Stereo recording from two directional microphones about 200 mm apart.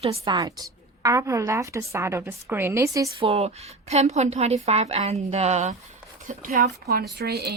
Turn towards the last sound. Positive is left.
turn(degrees=-55)  # may be behind; listen again after turning